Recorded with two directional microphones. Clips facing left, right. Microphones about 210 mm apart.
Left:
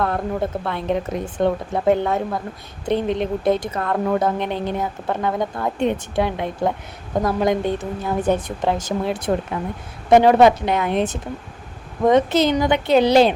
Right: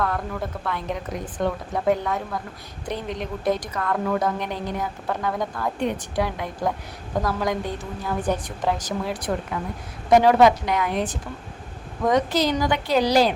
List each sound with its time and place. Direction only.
0.0 s speech: 25° left (ahead or behind)